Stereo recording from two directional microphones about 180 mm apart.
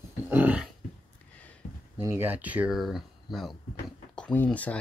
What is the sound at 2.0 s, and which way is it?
Speech, 10° right (ahead or behind).